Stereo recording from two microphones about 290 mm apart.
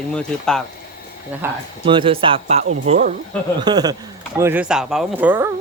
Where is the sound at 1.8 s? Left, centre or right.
Centre.